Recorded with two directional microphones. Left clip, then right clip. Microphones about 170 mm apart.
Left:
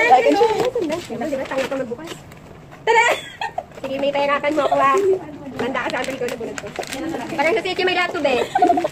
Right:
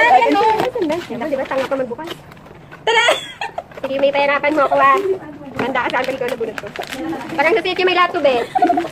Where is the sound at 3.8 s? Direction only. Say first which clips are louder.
Right 5 dB; 10° right (ahead or behind).